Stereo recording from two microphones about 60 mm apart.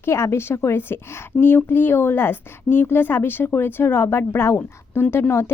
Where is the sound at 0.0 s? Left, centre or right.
Left.